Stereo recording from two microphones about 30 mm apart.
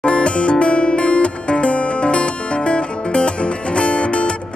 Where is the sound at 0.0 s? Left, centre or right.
Left.